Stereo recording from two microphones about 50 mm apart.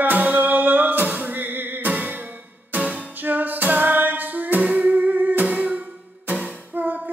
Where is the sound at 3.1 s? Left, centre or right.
Right.